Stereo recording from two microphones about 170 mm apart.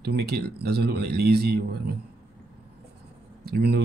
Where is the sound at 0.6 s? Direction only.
75° right (ahead or behind).